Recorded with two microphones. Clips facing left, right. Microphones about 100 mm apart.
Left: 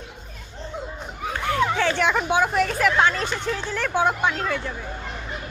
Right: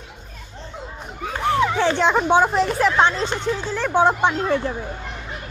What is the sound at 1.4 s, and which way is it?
Speech, 15° right (ahead or behind).